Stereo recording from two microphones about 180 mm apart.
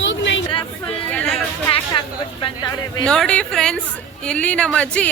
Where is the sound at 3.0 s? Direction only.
5° left (ahead or behind).